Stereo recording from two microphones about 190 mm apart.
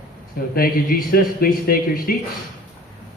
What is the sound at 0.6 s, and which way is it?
A man's voice, 50° left (ahead or behind).